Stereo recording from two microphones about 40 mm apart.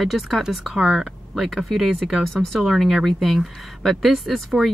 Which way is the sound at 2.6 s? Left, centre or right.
Centre.